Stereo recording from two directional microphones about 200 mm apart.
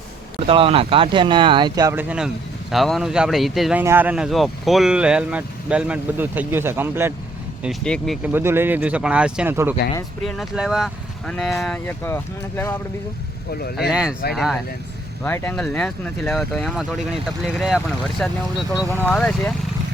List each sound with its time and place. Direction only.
0.3 s speech: 30° right (ahead or behind); by 7.1 s 10° right (ahead or behind)
7.6 s speech: centre (ahead or behind)
8.3 s speech: 10° right (ahead or behind); by 12.7 s 10° left (ahead or behind)
13.5 s speech: 50° left (ahead or behind)
13.9 s speech: 5° right (ahead or behind)
15.2 s speech: 10° left (ahead or behind)